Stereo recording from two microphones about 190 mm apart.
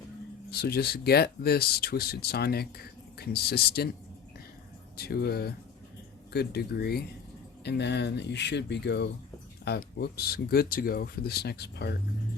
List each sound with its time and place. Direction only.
0.5 s speech: 60° left (ahead or behind)
4.9 s speech: 55° left (ahead or behind)